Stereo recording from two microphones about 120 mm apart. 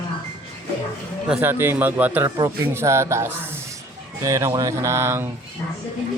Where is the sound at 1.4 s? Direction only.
20° right (ahead or behind).